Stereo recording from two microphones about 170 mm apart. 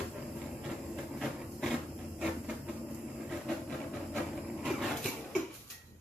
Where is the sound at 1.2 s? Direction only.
Centre (ahead or behind).